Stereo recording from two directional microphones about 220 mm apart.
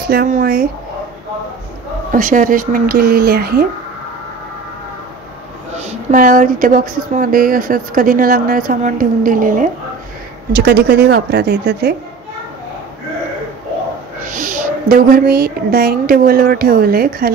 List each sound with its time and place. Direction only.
0.0 s speech: 45° right (ahead or behind)
2.1 s speech: 35° right (ahead or behind)
5.8 s speech: 35° right (ahead or behind)
10.5 s speech: 50° right (ahead or behind)
14.2 s a woman's voice: 35° right (ahead or behind)